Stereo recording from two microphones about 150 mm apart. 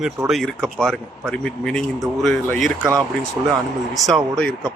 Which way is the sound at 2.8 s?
20° right (ahead or behind).